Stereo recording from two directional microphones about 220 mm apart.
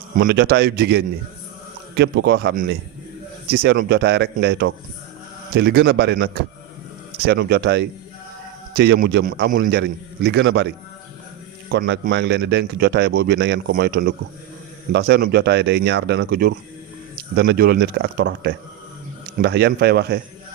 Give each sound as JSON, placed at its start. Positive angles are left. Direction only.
{"t": 0.3, "sound": "a man's voice", "side_deg": -50}
{"t": 11.7, "sound": "a man's voice", "side_deg": -45}